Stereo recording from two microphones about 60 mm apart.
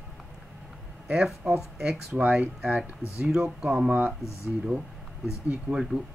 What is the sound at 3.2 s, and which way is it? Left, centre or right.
Speech, centre.